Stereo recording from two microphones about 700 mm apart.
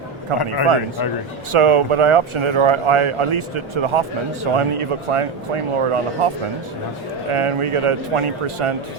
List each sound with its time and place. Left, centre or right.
0.3 s speech: right
1.5 s speech: right